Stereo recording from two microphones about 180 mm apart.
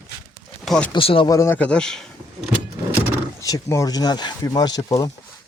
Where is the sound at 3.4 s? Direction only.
20° left (ahead or behind).